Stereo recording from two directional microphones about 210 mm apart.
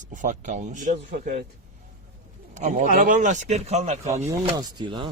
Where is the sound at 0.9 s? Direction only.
45° right (ahead or behind).